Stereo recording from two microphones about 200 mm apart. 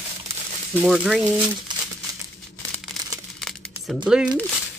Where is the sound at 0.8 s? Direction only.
Centre (ahead or behind).